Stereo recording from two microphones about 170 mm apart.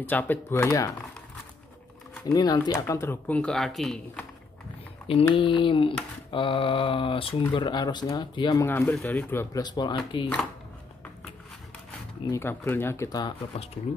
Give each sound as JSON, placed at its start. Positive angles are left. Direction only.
{"t": 0.0, "sound": "speech", "side_deg": 10}
{"t": 2.2, "sound": "speech", "side_deg": 20}
{"t": 5.3, "sound": "speech", "side_deg": 30}
{"t": 8.6, "sound": "speech", "side_deg": 15}
{"t": 12.3, "sound": "speech", "side_deg": 15}